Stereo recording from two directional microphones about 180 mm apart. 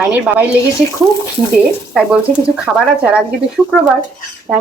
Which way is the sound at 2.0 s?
5° right (ahead or behind).